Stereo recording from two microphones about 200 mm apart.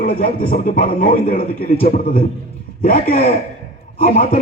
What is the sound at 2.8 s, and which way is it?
Speech, 45° left (ahead or behind).